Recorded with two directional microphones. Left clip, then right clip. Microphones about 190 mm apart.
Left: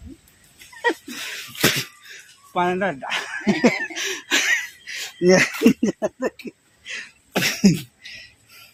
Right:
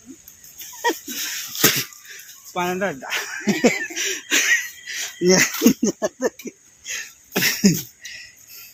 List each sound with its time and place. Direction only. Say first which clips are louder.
0.8 s dog: even; 15° left (ahead or behind)
1.6 s a sound: even; 40° left (ahead or behind)
5.2 s speech: left 1 dB; 35° left (ahead or behind)
5.6 s a sound: even; 20° left (ahead or behind)
6.8 s cough: right 2 dB; 20° left (ahead or behind)
7.3 s cough: right 1 dB; 40° left (ahead or behind)